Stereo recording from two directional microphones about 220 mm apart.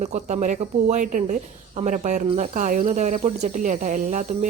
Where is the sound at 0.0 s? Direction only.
30° right (ahead or behind).